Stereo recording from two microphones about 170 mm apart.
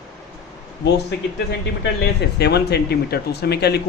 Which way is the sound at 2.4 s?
75° left (ahead or behind).